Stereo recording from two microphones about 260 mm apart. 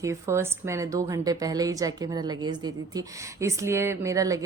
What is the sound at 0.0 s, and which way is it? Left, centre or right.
A woman's voice, centre.